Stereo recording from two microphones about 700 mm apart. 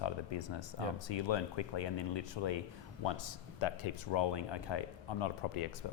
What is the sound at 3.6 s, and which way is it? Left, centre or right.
Speech, left.